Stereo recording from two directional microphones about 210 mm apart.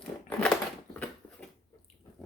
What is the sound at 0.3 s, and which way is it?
Crushing, 5° left (ahead or behind).